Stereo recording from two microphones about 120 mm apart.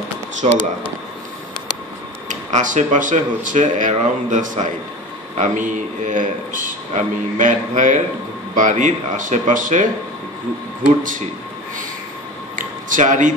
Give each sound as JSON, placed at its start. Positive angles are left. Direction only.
{"t": 0.4, "sound": "speech", "side_deg": -65}
{"t": 2.2, "sound": "a man's voice", "side_deg": -90}
{"t": 11.0, "sound": "a man's voice", "side_deg": -90}
{"t": 12.5, "sound": "a sound", "side_deg": -90}